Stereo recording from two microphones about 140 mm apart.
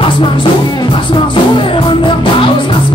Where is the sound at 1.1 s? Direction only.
35° left (ahead or behind).